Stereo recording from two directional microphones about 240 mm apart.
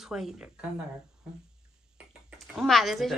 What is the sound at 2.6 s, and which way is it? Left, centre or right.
Speech, centre.